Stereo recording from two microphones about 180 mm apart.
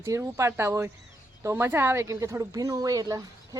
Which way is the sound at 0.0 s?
15° right (ahead or behind).